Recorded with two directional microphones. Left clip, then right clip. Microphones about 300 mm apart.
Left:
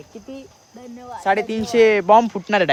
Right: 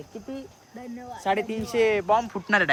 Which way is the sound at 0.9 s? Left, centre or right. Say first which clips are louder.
Left 6 dB; centre.